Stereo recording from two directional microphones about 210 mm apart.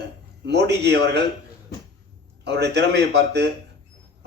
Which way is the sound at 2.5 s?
55° right (ahead or behind).